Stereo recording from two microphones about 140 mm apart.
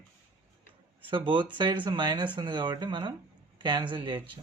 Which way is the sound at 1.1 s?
35° right (ahead or behind).